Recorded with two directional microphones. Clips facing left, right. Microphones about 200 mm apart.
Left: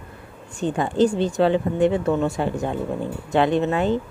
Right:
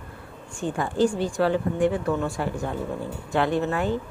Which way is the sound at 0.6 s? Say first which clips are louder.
Left 4 dB; 20° left (ahead or behind).